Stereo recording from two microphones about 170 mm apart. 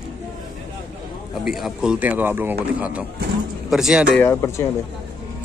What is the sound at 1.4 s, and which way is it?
Speech, centre (ahead or behind).